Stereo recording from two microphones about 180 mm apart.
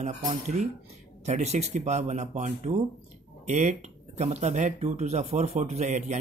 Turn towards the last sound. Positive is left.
turn(degrees=-40)  # may be behind; listen again after turning